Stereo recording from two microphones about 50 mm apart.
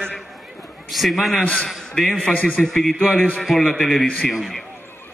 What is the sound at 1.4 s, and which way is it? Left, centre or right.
Speech, left.